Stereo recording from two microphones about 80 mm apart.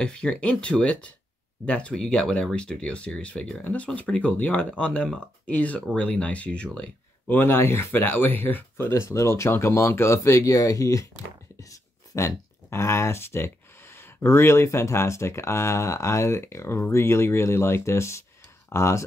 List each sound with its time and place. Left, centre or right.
0.0 s speech: centre
7.3 s speech: left